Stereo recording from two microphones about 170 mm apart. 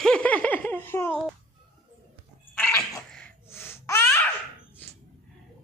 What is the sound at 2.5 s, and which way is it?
Cat, 10° left (ahead or behind).